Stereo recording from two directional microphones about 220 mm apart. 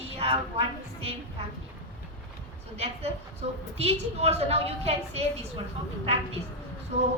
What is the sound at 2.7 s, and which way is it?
A woman's voice, 30° right (ahead or behind).